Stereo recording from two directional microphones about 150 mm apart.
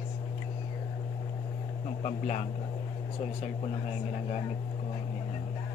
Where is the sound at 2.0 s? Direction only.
45° left (ahead or behind).